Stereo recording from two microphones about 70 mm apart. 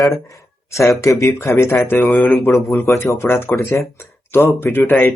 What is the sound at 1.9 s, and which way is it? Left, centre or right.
Speech, left.